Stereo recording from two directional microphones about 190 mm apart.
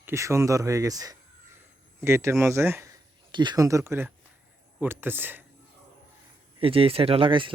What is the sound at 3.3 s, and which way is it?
Speech, 25° right (ahead or behind).